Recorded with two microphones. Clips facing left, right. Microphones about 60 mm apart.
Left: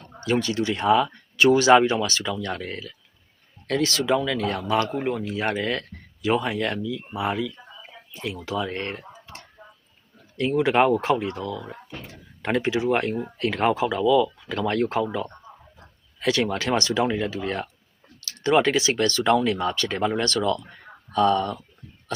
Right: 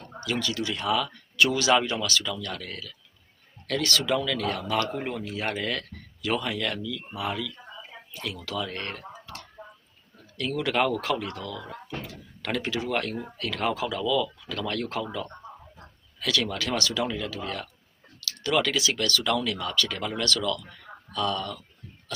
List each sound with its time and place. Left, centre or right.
0.2 s speech: left